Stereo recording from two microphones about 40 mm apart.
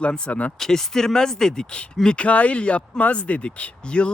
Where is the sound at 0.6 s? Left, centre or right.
Centre.